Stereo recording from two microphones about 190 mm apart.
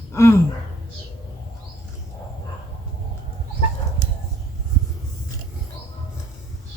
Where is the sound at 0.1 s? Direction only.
15° left (ahead or behind).